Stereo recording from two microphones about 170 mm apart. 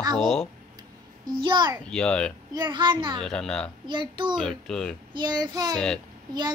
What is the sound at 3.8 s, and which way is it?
Speech, 25° right (ahead or behind).